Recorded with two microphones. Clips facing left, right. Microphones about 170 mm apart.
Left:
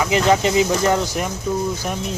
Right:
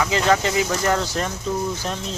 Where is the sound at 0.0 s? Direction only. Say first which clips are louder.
Left 3 dB; 20° left (ahead or behind).